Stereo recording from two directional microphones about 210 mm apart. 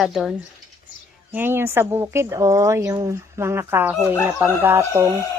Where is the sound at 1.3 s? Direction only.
10° right (ahead or behind).